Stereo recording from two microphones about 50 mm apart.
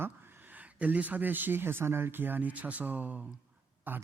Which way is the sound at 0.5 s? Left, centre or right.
Right.